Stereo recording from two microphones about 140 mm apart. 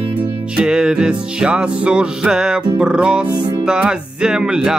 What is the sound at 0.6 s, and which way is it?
Music, 5° right (ahead or behind).